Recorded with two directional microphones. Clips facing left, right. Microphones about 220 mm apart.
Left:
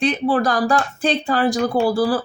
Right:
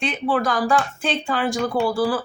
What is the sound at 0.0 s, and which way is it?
Speech, 35° left (ahead or behind).